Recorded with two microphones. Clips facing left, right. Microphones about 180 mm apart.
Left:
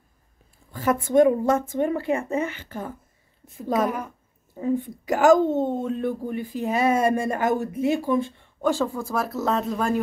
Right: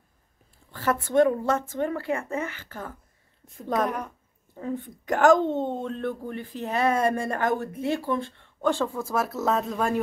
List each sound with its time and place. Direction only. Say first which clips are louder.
0.7 s a woman's voice: left 3 dB; 15° left (ahead or behind)
3.4 s a woman's voice: left 3 dB; 5° left (ahead or behind)